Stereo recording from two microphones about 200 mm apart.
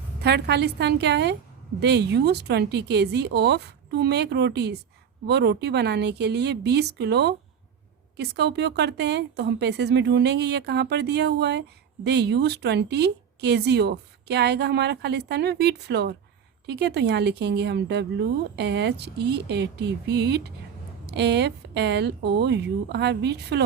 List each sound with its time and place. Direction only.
0.2 s speech: 55° right (ahead or behind)